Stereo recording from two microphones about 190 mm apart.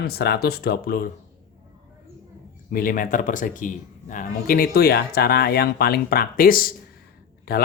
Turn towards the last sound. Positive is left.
turn(degrees=55)  # may be behind; listen again after turning